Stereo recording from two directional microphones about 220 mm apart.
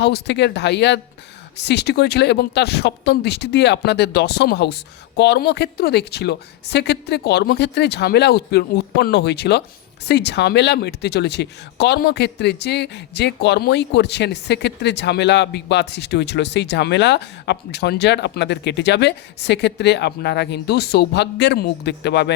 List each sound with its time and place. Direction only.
0.0 s speech: 50° left (ahead or behind)